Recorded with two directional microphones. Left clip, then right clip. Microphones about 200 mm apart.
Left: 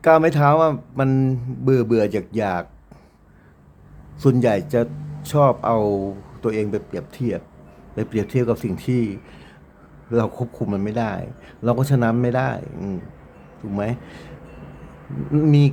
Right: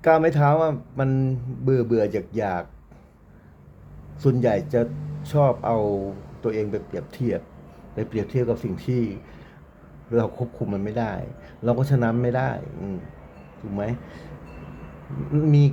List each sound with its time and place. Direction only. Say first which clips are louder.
0.0 s a man's voice: left 3 dB; 15° left (ahead or behind)
4.2 s a man's voice: left 3 dB; 15° left (ahead or behind)
7.9 s a man's voice: left 3 dB; 20° left (ahead or behind)
15.3 s a man's voice: left 4 dB; 15° left (ahead or behind)